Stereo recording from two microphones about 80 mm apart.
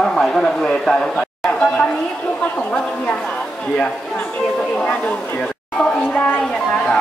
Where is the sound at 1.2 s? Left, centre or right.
Centre.